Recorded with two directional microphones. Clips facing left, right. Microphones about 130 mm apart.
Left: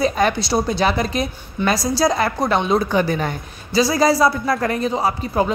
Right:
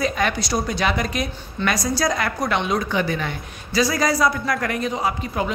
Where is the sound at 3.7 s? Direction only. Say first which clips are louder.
Left 4 dB; 30° left (ahead or behind).